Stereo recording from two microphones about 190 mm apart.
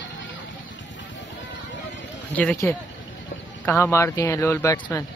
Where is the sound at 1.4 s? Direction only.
70° left (ahead or behind).